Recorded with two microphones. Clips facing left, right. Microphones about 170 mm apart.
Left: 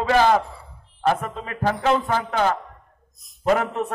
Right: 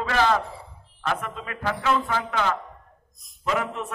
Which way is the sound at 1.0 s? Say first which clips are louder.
Left 6 dB; 35° left (ahead or behind).